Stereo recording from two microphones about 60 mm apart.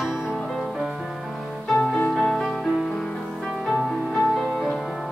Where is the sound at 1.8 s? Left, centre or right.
Left.